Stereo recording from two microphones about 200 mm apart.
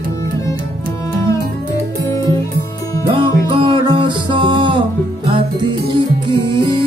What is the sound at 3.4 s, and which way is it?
Music, 25° right (ahead or behind).